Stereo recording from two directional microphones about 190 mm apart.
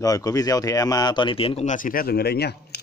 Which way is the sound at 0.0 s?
20° left (ahead or behind).